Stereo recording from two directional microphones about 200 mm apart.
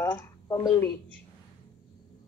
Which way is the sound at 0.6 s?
5° left (ahead or behind).